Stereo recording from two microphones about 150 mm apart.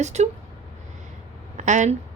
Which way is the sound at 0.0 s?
50° right (ahead or behind).